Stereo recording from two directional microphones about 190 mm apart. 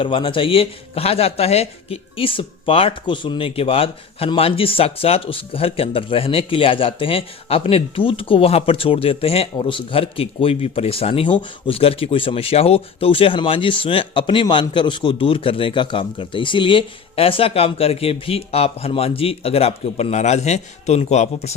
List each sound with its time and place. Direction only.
0.0 s speech: 25° left (ahead or behind)